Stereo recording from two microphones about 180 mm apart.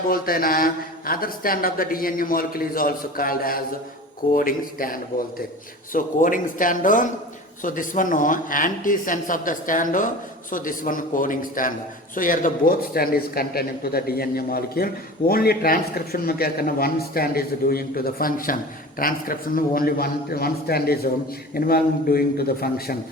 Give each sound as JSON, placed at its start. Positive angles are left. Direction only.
{"t": 0.1, "sound": "a man's voice", "side_deg": 55}